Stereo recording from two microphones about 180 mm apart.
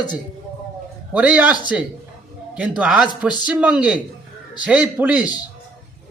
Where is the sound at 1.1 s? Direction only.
5° right (ahead or behind).